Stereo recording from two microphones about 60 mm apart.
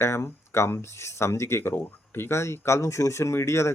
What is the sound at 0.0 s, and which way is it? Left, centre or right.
Speech, left.